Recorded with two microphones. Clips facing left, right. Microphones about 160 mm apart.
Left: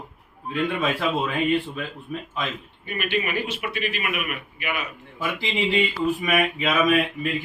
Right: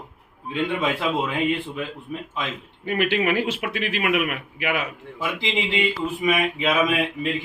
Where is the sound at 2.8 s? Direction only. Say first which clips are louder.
Right 5 dB; 90° right.